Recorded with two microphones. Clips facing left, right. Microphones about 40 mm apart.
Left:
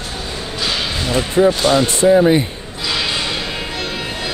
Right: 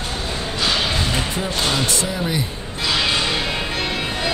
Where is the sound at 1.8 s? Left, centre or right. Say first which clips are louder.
Left 11 dB; left.